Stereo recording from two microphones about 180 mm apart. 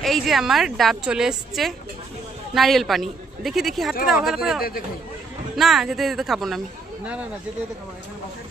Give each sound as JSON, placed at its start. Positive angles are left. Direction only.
{"t": 0.0, "sound": "a woman's voice", "side_deg": 0}